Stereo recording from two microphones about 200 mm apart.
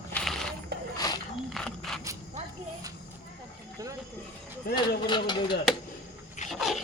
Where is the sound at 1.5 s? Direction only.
Centre (ahead or behind).